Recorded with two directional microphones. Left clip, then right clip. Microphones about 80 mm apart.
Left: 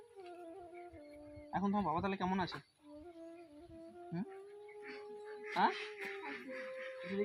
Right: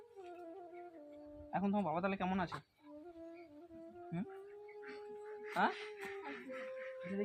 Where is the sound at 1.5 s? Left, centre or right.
Right.